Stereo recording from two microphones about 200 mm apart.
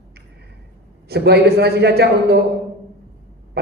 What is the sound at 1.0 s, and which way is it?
A man's voice, 55° right (ahead or behind).